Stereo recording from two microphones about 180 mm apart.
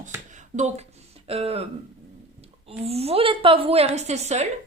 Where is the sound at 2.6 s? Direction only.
35° right (ahead or behind).